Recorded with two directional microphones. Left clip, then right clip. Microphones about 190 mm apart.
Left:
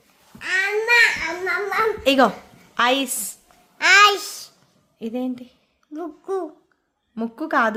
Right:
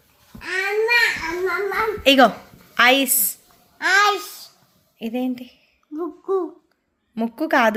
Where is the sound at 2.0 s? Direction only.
5° left (ahead or behind).